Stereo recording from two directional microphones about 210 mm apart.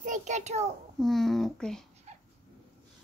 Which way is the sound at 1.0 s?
Centre (ahead or behind).